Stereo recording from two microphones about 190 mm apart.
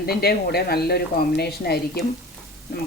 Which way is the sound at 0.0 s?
55° left (ahead or behind).